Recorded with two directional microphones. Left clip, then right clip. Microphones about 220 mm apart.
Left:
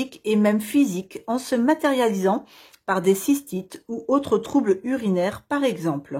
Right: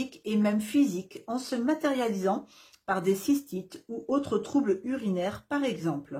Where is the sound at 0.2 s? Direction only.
35° left (ahead or behind).